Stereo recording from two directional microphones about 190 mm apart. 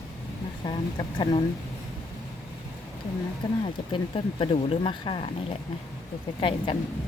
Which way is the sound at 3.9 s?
25° left (ahead or behind).